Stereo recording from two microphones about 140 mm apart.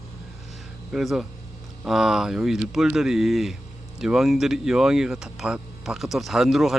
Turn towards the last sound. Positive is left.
turn(degrees=0)  # may be behind; listen again after turning